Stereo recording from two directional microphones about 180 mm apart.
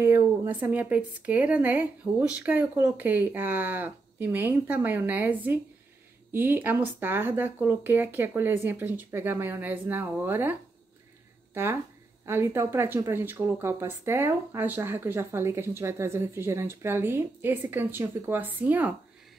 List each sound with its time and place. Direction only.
0.0 s speech: 15° right (ahead or behind)
12.3 s speech: 15° right (ahead or behind)